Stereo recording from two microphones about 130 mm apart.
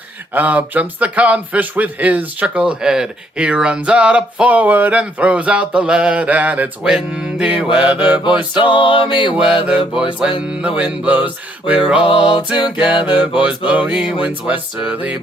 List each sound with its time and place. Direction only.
0.3 s a man's voice: 10° right (ahead or behind)
8.5 s music: 40° left (ahead or behind)
9.3 s a man's voice: 5° right (ahead or behind)
12.3 s music: 40° left (ahead or behind)
12.7 s a man's voice: 10° right (ahead or behind)